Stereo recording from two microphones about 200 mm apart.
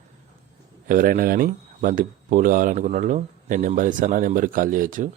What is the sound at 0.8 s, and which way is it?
Speech, 45° right (ahead or behind).